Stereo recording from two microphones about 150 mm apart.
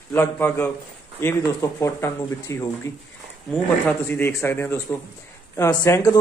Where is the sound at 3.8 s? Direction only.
15° left (ahead or behind).